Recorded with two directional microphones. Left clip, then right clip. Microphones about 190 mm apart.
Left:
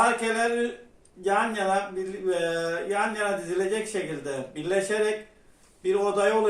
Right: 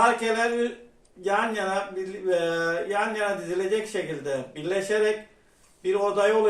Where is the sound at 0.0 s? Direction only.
10° left (ahead or behind).